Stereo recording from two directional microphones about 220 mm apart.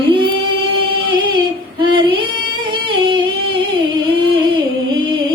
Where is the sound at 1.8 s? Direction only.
20° right (ahead or behind).